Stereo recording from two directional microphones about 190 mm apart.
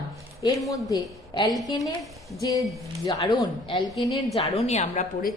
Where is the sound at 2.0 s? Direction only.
Centre (ahead or behind).